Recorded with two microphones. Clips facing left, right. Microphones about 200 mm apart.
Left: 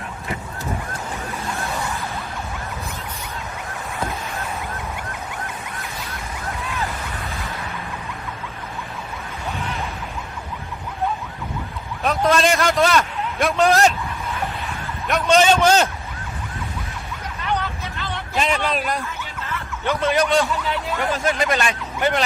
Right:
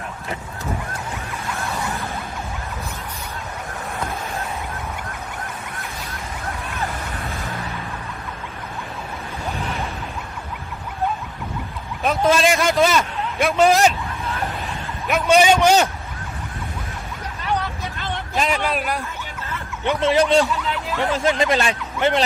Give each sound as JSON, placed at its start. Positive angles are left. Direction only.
{"t": 12.0, "sound": "a sound", "side_deg": 0}
{"t": 13.4, "sound": "a man's voice", "side_deg": 0}
{"t": 15.3, "sound": "a man's voice", "side_deg": -10}
{"t": 18.3, "sound": "a man's voice", "side_deg": 0}
{"t": 19.8, "sound": "speech", "side_deg": -20}